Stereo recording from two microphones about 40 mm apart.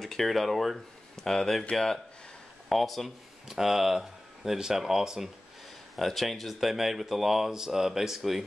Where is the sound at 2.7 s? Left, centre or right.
Centre.